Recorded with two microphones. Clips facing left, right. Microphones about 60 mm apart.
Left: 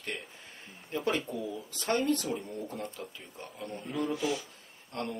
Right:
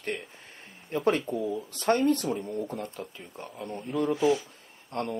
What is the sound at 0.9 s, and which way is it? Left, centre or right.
Speech, right.